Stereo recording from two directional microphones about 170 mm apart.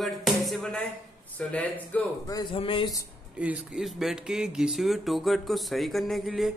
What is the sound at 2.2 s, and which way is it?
Speech, 25° left (ahead or behind).